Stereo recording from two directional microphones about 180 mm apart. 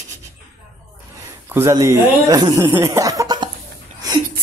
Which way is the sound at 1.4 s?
15° right (ahead or behind).